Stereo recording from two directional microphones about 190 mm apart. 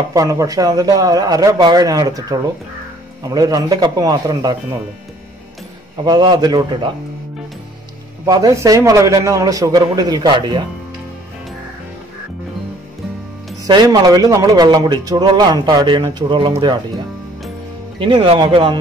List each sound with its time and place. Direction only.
0.1 s a man's voice: 15° right (ahead or behind)
6.0 s a man's voice: 25° right (ahead or behind)
8.3 s a man's voice: 20° right (ahead or behind)
13.7 s a man's voice: 20° right (ahead or behind)
17.9 s a man's voice: 25° right (ahead or behind)